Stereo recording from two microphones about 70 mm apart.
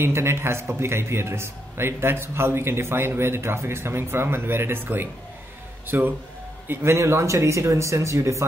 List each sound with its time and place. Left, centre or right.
0.0 s a man's voice: right